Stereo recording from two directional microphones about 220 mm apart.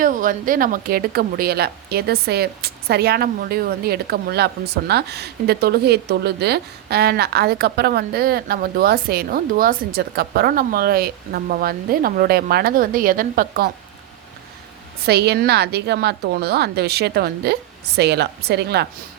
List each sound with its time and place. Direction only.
0.0 s a woman's voice: 35° right (ahead or behind)
15.0 s a woman's voice: 45° right (ahead or behind)